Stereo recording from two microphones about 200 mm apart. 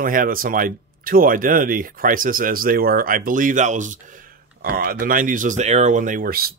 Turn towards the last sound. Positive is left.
turn(degrees=-50)  # may be behind; listen again after turning